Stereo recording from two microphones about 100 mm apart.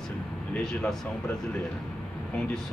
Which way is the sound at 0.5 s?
5° left (ahead or behind).